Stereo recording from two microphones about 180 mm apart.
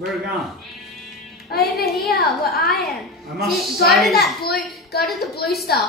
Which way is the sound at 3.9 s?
Centre (ahead or behind).